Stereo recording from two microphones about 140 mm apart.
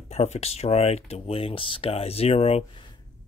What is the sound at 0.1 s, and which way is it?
Speech, 50° left (ahead or behind).